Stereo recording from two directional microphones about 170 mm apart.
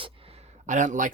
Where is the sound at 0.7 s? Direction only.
45° right (ahead or behind).